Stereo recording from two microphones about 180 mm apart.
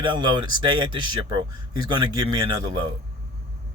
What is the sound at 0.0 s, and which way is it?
Speech, 25° right (ahead or behind).